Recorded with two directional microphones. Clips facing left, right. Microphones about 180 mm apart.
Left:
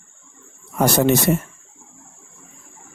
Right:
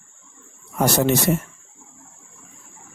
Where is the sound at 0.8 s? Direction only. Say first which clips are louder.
Left 2 dB; 55° left (ahead or behind).